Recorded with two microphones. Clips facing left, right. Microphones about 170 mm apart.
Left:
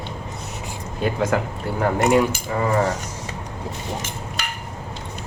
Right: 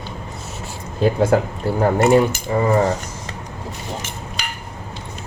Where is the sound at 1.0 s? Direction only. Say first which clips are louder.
Right 5 dB; 35° right (ahead or behind).